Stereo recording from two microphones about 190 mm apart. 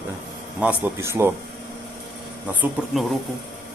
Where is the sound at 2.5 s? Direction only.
5° right (ahead or behind).